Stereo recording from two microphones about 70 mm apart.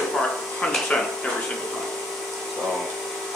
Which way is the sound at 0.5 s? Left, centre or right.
Centre.